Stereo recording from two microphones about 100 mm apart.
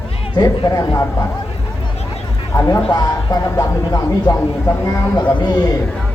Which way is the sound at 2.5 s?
30° left (ahead or behind).